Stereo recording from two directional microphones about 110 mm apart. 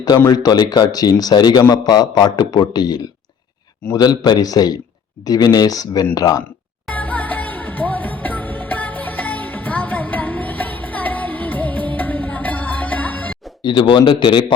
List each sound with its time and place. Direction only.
0.3 s speech: 35° left (ahead or behind)
6.9 s music: 15° left (ahead or behind)
13.6 s a man's voice: 45° left (ahead or behind)